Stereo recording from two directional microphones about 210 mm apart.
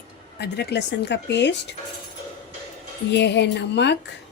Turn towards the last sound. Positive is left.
turn(degrees=55)  # may be behind; listen again after turning